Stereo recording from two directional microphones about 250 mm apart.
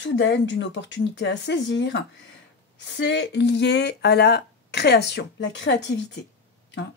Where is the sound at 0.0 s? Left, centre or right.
Left.